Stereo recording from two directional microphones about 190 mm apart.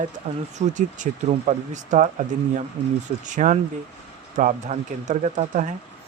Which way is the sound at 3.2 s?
40° right (ahead or behind).